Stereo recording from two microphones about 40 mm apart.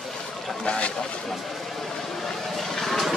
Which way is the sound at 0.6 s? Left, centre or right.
Left.